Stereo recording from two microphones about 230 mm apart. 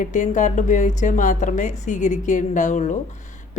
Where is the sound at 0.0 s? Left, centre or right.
Left.